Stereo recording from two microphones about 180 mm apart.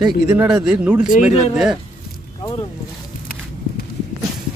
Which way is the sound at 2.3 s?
25° left (ahead or behind).